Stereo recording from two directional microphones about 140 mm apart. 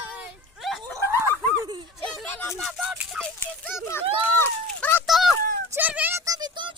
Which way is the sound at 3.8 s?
15° left (ahead or behind).